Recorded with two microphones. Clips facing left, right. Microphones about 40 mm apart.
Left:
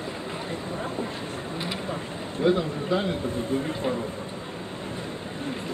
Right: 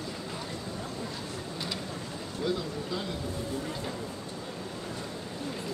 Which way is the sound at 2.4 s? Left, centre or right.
Left.